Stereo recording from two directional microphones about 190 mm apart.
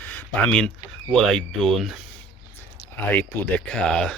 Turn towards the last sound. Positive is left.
turn(degrees=5)  # may be behind; listen again after turning